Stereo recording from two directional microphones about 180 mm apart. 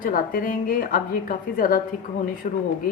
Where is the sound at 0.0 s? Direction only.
50° left (ahead or behind).